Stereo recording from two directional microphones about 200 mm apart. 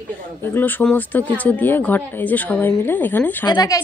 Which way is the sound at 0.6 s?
10° left (ahead or behind).